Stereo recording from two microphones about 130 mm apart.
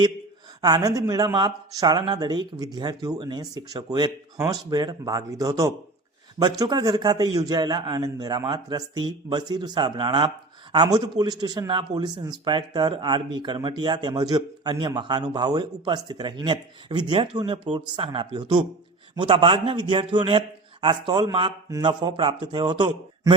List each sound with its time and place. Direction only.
0.6 s a man's voice: 30° right (ahead or behind)